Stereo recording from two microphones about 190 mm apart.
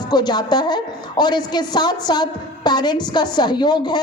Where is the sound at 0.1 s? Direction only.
20° left (ahead or behind).